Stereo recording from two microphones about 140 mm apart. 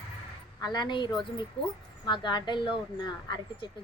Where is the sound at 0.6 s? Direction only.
30° left (ahead or behind).